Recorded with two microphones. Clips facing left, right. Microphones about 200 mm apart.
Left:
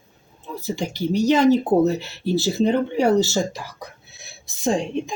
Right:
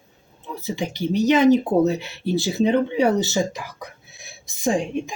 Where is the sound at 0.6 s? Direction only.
15° right (ahead or behind).